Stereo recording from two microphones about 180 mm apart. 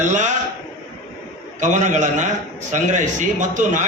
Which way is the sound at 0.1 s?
45° right (ahead or behind).